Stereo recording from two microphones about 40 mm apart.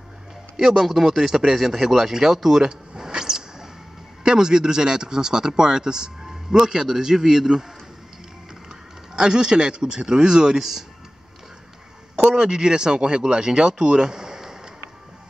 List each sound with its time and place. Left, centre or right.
0.6 s a man's voice: centre
9.1 s speech: centre
12.2 s speech: right